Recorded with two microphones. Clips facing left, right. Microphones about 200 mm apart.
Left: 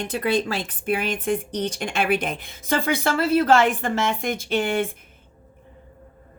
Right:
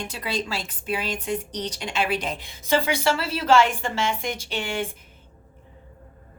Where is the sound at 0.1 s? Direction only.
55° left (ahead or behind).